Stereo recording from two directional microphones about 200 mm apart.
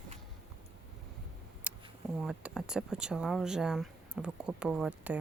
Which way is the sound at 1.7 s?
5° right (ahead or behind).